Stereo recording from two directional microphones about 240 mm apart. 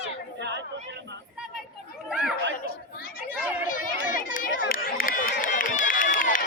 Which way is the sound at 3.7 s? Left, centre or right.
Left.